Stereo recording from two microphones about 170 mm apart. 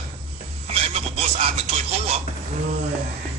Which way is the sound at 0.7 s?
35° right (ahead or behind).